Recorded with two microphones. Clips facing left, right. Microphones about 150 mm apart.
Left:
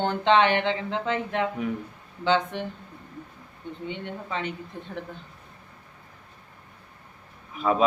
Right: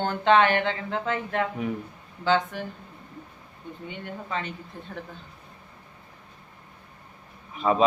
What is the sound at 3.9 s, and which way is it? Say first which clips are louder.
Speech: even; 20° left (ahead or behind).